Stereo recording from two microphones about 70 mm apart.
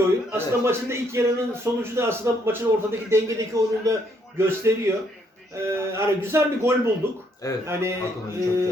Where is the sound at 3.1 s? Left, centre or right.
Right.